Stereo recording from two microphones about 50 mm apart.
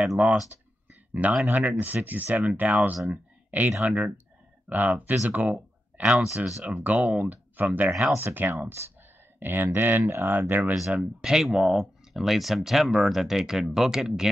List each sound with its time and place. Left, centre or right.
0.2 s speech: right
1.5 s speech: right
3.1 s a sound: right
3.8 s speech: right
6.0 s speech: centre
6.8 s speech: right
8.2 s speech: right
10.7 s speech: centre
11.4 s speech: centre